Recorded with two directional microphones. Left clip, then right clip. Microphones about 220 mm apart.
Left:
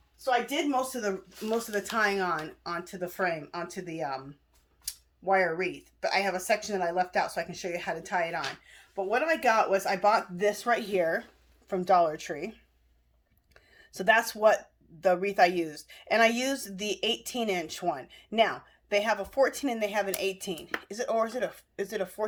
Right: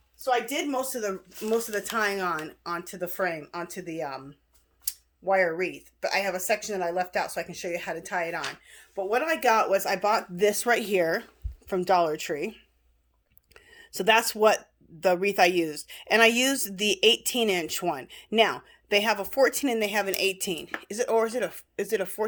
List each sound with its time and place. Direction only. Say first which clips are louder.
0.3 s speech: right 1 dB; 45° right (ahead or behind)
8.6 s a woman's voice: right 2 dB; 50° right (ahead or behind)
13.5 s a sound: right 7 dB; 40° right (ahead or behind)
15.0 s a woman's voice: right 2 dB; 40° right (ahead or behind)